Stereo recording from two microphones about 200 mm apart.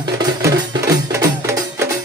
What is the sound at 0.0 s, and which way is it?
Music, 20° right (ahead or behind).